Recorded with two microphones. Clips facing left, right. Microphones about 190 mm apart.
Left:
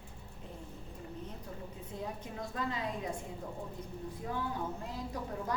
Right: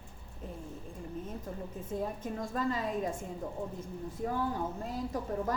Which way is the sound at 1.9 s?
45° right (ahead or behind).